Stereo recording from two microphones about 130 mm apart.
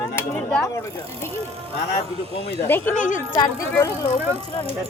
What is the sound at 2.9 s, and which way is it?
Speech, 75° left (ahead or behind).